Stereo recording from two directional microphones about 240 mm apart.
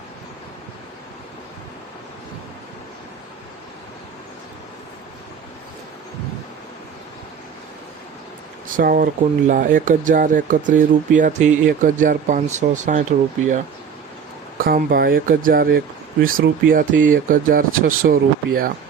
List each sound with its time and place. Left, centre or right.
8.7 s speech: right
14.6 s speech: right